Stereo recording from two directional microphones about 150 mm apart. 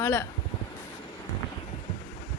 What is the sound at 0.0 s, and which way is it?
Speech, 15° left (ahead or behind).